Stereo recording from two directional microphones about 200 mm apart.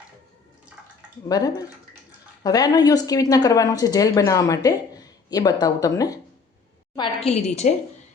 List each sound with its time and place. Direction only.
1.3 s a woman's voice: 20° left (ahead or behind)